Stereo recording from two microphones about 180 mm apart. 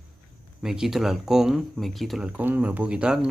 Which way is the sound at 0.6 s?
Centre (ahead or behind).